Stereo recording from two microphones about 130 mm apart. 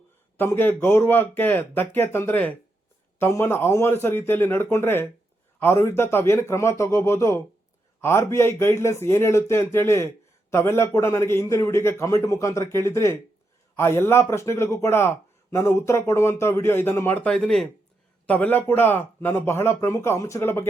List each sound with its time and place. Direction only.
0.3 s a man's voice: 15° left (ahead or behind)